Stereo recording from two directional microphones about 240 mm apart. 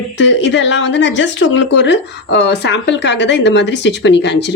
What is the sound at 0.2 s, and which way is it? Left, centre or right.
Speech, left.